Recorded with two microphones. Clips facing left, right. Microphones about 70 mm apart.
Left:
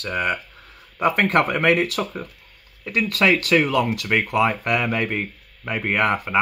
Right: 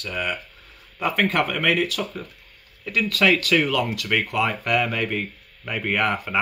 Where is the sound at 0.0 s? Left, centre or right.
Left.